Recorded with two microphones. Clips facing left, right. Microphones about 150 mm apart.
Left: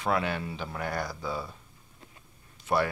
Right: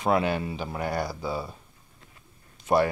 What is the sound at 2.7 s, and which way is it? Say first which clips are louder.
Speech: right 5 dB; 20° right (ahead or behind).